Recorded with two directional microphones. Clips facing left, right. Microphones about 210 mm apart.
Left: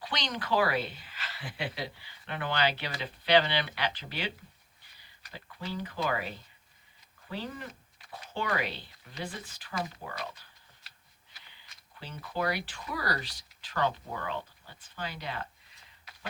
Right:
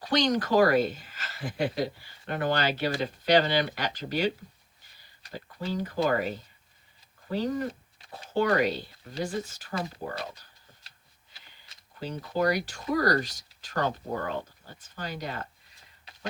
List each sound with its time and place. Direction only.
0.0 s speech: 45° right (ahead or behind)
5.3 s speech: 40° right (ahead or behind)
11.9 s speech: 40° right (ahead or behind)